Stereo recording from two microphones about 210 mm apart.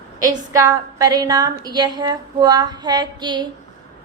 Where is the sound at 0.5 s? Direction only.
20° right (ahead or behind).